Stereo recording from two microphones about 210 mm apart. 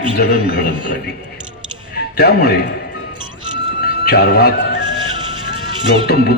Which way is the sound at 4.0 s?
50° left (ahead or behind).